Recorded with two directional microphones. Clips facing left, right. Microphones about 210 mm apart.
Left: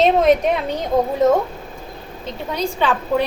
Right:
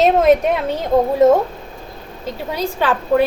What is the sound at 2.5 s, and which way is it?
Speech, 5° right (ahead or behind).